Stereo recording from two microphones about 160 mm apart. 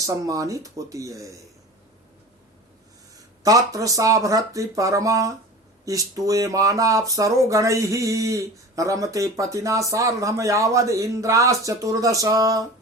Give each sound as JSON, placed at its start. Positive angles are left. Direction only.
{"t": 0.0, "sound": "speech", "side_deg": -20}
{"t": 3.4, "sound": "speech", "side_deg": -20}